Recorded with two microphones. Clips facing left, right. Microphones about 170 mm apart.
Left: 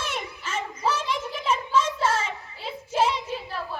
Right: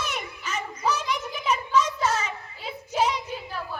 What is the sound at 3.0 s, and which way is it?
Child singing, 25° left (ahead or behind).